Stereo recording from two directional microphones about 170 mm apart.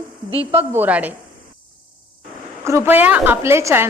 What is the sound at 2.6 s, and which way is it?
A woman's voice, 15° right (ahead or behind).